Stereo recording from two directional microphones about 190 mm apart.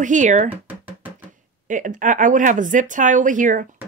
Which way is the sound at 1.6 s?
45° right (ahead or behind).